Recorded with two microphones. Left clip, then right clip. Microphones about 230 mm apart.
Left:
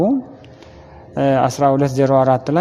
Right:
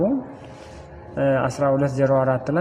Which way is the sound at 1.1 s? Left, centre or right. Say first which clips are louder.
Left 5 dB; left.